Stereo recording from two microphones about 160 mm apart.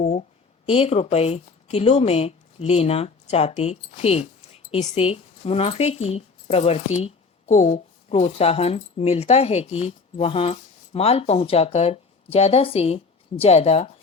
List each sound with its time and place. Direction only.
0.6 s speech: 40° left (ahead or behind)